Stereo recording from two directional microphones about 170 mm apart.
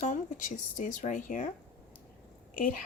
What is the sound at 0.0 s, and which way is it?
Speech, 50° left (ahead or behind).